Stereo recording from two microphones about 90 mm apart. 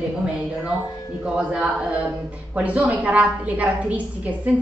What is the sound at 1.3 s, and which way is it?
A woman's voice, 10° right (ahead or behind).